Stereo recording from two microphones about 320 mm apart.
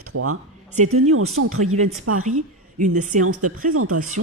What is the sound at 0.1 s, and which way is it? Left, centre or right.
Speech, right.